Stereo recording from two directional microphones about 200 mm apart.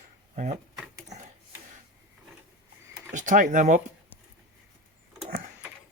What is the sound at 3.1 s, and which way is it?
Speech, 40° right (ahead or behind).